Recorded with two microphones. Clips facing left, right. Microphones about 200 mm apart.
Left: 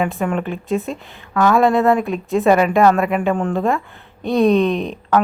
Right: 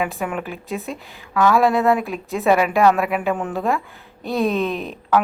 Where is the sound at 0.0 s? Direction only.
5° right (ahead or behind).